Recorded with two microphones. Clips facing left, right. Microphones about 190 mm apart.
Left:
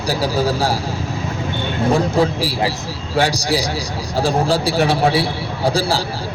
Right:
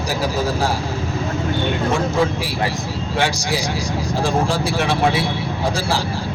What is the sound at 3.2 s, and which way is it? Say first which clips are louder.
A man's voice: left 4 dB; 35° left (ahead or behind).